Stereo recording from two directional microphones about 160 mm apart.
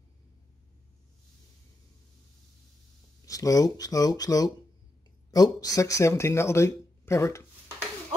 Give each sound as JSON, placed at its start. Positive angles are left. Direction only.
{"t": 3.3, "sound": "speech", "side_deg": 20}